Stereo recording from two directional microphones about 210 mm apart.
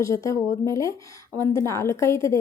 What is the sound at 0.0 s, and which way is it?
A woman's voice, 15° left (ahead or behind).